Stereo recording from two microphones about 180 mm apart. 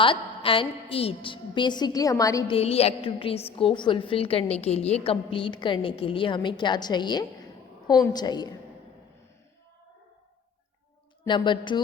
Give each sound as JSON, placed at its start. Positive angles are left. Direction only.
{"t": 0.0, "sound": "a woman's voice", "side_deg": 30}
{"t": 2.5, "sound": "a woman's voice", "side_deg": 35}
{"t": 11.3, "sound": "a woman's voice", "side_deg": 25}